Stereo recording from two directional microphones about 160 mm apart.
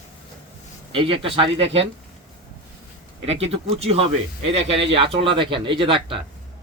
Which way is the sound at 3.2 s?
40° right (ahead or behind).